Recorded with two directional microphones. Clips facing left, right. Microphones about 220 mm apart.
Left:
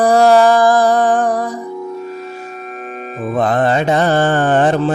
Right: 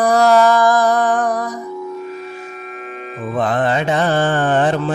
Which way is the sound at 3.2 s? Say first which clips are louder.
Left 3 dB; 45° left (ahead or behind).